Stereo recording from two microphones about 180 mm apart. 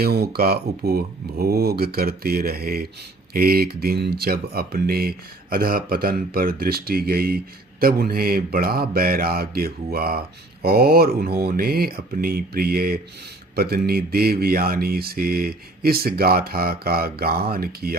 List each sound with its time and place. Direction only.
0.0 s speech: 60° right (ahead or behind)